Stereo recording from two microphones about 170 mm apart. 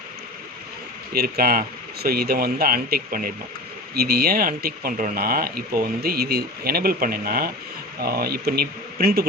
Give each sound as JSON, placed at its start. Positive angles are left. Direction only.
{"t": 1.1, "sound": "speech", "side_deg": -60}